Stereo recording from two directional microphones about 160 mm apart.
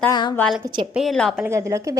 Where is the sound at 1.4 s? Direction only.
20° right (ahead or behind).